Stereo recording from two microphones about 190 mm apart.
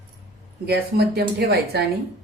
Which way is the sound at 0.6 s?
60° right (ahead or behind).